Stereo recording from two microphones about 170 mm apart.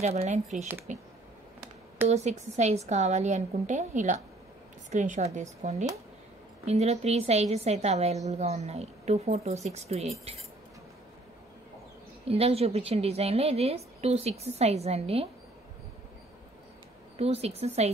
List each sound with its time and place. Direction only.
0.0 s a woman's voice: 40° right (ahead or behind)
2.0 s a woman's voice: 40° right (ahead or behind)
12.3 s a woman's voice: 35° right (ahead or behind)
17.2 s a woman's voice: 35° right (ahead or behind)